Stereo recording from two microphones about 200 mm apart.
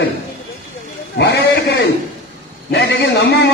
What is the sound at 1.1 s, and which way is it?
A man's voice, 55° left (ahead or behind).